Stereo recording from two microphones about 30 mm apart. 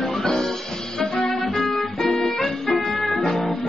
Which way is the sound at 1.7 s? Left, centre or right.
Centre.